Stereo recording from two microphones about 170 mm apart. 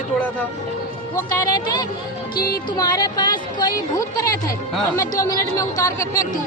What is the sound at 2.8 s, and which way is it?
A woman's voice, 20° left (ahead or behind).